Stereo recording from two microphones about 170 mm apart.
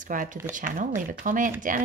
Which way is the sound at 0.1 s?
50° right (ahead or behind).